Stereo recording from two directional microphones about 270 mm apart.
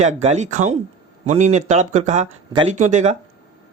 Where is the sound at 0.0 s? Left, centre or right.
Right.